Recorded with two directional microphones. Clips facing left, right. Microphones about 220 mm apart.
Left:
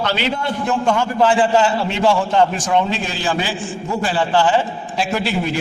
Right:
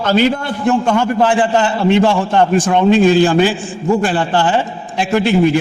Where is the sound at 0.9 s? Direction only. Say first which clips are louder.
Right 3 dB; 55° right (ahead or behind).